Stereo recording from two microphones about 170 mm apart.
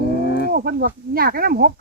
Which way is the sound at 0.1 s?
65° left (ahead or behind).